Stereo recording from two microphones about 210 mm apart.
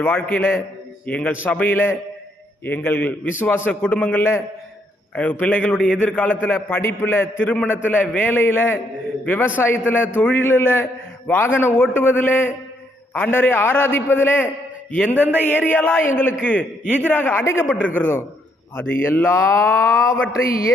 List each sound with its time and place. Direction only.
0.0 s a man's voice: 10° left (ahead or behind)
20.4 s speech: 45° left (ahead or behind)